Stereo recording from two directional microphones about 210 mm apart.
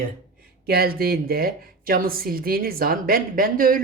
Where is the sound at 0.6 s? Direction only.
45° right (ahead or behind).